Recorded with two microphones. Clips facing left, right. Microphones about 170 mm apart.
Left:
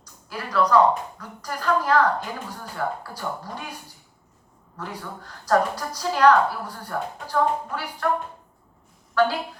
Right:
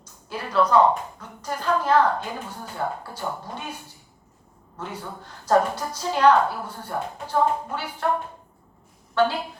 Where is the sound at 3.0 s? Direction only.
25° right (ahead or behind).